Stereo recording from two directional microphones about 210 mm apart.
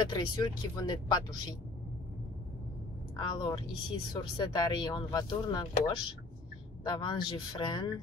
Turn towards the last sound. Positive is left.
turn(degrees=20)  # may be behind; listen again after turning